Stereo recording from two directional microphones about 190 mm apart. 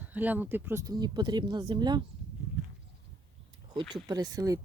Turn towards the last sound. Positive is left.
turn(degrees=-20)  # may be behind; listen again after turning